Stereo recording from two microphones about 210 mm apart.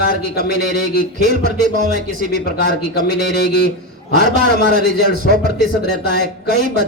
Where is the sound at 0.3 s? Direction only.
50° left (ahead or behind).